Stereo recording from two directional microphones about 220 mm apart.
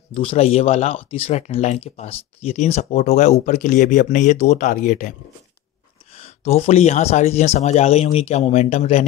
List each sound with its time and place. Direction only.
0.1 s speech: 25° left (ahead or behind)
6.1 s speech: 30° left (ahead or behind)